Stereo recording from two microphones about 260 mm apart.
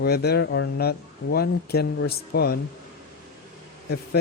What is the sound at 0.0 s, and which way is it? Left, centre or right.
Speech, left.